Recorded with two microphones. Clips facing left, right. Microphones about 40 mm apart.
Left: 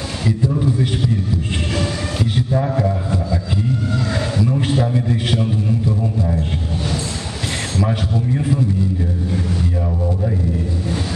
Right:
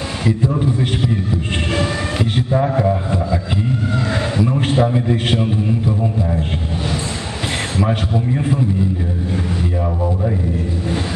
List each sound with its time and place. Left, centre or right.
0.2 s a man's voice: right
7.7 s a man's voice: centre